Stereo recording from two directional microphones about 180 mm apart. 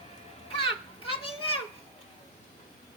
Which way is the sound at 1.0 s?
30° left (ahead or behind).